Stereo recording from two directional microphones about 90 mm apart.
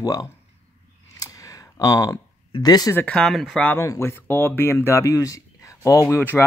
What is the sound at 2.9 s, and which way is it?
Speech, 15° left (ahead or behind).